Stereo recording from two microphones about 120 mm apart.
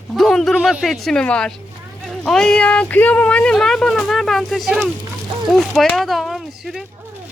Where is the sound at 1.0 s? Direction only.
5° left (ahead or behind).